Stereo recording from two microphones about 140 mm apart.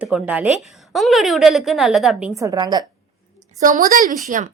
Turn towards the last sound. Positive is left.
turn(degrees=-70)  # may be behind; listen again after turning